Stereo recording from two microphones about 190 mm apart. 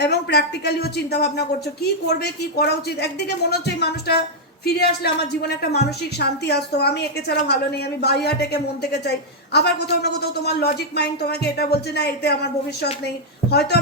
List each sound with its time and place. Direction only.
0.0 s a woman's voice: 60° left (ahead or behind)
5.4 s a woman's voice: 60° left (ahead or behind)